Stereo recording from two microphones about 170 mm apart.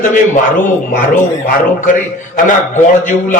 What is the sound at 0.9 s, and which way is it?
A man's voice, 50° left (ahead or behind).